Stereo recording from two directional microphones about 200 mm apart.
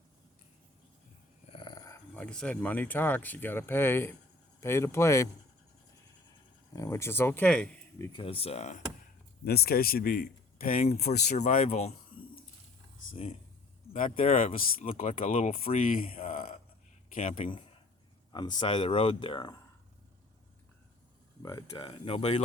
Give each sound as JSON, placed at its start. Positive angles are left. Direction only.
{"t": 1.5, "sound": "speech", "side_deg": 20}
{"t": 6.7, "sound": "speech", "side_deg": 15}
{"t": 8.2, "sound": "speech", "side_deg": 30}
{"t": 9.4, "sound": "a man's voice", "side_deg": 50}
{"t": 13.9, "sound": "speech", "side_deg": 35}
{"t": 21.4, "sound": "speech", "side_deg": 25}